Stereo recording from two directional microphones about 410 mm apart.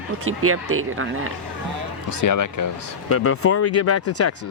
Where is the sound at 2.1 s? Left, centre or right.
Left.